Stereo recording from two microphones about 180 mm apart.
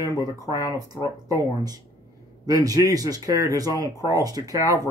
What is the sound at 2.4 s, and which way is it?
Speech, 20° right (ahead or behind).